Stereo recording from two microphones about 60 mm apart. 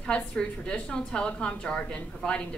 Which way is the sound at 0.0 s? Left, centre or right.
Centre.